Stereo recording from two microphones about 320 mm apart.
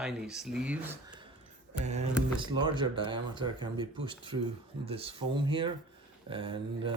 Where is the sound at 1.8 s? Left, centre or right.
Right.